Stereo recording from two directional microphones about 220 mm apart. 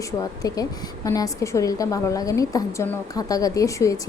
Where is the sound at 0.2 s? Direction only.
15° left (ahead or behind).